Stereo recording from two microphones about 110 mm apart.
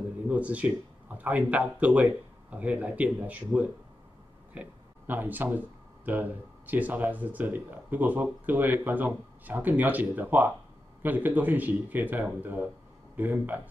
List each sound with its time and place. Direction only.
0.3 s speech: 10° right (ahead or behind)